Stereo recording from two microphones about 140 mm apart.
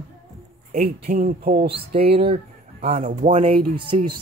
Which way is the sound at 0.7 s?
90° right.